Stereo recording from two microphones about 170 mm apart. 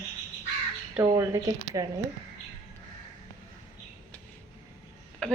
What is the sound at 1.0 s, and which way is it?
Speech, 20° right (ahead or behind).